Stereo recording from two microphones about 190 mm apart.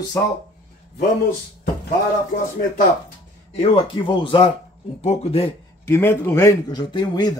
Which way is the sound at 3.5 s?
25° left (ahead or behind).